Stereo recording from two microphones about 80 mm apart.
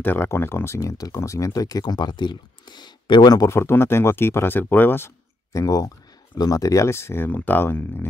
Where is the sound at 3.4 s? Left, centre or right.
Left.